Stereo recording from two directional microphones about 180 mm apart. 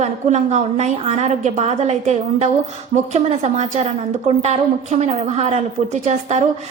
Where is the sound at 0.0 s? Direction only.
40° right (ahead or behind).